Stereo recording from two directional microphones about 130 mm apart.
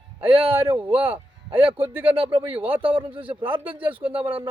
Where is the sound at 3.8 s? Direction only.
15° right (ahead or behind).